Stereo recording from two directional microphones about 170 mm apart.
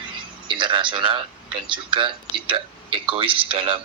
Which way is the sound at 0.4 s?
30° right (ahead or behind).